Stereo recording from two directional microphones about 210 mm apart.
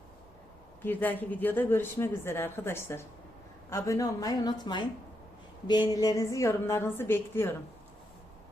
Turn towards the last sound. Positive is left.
turn(degrees=10)  # may be behind; listen again after turning